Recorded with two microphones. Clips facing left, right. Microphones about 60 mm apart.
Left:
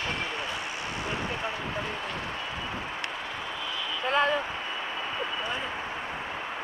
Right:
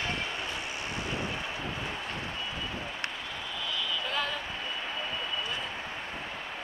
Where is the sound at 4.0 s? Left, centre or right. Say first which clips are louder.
Left 12 dB; left.